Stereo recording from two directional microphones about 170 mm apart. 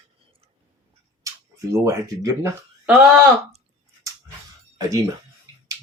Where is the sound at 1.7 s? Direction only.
20° right (ahead or behind).